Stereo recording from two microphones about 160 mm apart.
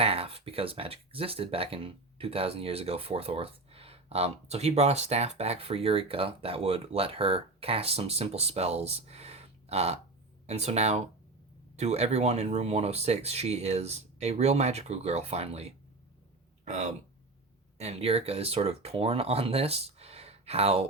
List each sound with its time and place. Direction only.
0.0 s speech: 40° right (ahead or behind)